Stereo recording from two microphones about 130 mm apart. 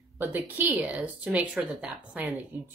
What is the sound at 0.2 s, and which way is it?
A woman's voice, 15° right (ahead or behind).